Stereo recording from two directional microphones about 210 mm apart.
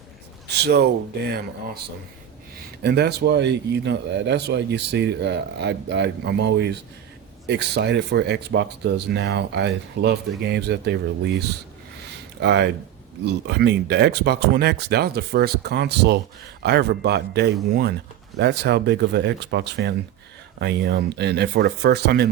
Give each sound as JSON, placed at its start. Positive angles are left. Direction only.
{"t": 0.6, "sound": "speech", "side_deg": -50}
{"t": 2.8, "sound": "speech", "side_deg": -50}